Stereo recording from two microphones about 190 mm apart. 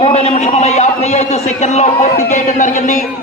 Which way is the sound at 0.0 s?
35° left (ahead or behind).